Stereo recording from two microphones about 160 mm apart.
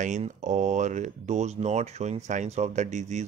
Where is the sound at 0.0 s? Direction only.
50° right (ahead or behind).